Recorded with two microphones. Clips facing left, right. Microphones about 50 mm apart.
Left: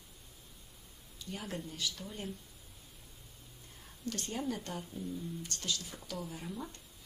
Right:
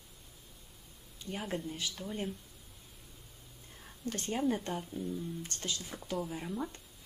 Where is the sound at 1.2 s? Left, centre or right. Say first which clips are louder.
Right 4 dB; right.